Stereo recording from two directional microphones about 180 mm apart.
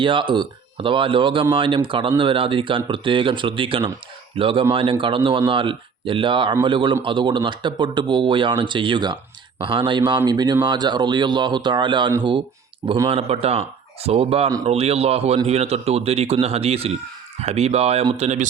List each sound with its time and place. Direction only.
0.0 s speech: 30° right (ahead or behind)